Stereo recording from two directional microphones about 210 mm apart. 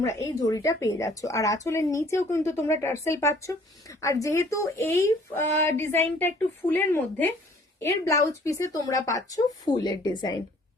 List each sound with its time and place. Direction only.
0.0 s speech: 15° left (ahead or behind)